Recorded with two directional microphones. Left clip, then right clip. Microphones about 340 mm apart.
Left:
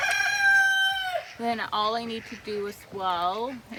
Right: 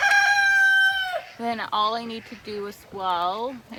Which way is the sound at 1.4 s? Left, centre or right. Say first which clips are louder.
Right 3 dB; centre.